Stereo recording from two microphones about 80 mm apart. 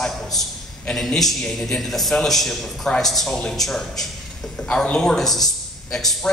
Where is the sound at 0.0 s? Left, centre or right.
Centre.